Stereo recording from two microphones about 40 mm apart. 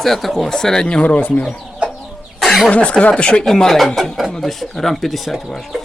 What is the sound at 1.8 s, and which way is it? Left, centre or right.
Chicken, right.